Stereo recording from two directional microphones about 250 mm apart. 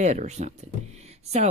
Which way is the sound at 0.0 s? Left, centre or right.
Right.